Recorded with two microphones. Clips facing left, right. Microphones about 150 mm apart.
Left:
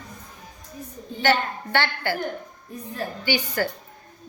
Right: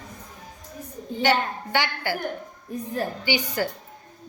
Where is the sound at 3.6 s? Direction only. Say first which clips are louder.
Left 2 dB; 15° right (ahead or behind).